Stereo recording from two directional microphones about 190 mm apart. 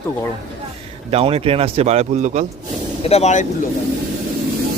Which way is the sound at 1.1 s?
30° right (ahead or behind).